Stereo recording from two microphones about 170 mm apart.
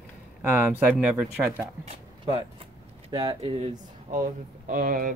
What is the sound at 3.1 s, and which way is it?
Speech, 30° right (ahead or behind).